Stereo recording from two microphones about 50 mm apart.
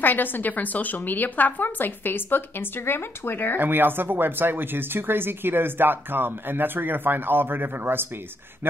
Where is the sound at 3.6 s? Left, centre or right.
Right.